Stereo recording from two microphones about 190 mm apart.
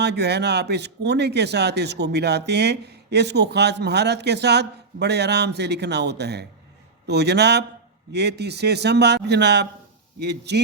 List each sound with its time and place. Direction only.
0.0 s speech: 60° right (ahead or behind)